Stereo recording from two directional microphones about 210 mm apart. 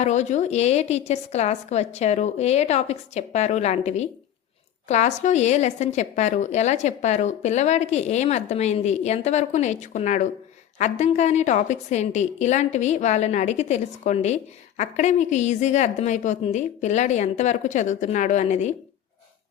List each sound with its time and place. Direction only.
0.0 s a woman's voice: 35° left (ahead or behind)